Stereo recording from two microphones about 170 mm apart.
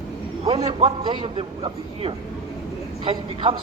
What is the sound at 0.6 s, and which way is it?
A man's voice, 35° right (ahead or behind).